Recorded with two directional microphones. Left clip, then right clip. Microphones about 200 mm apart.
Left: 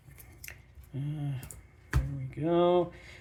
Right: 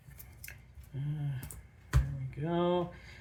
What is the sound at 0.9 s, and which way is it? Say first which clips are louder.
Speech: left 4 dB; 45° left (ahead or behind).